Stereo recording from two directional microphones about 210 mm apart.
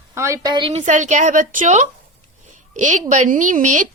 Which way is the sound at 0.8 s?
35° right (ahead or behind).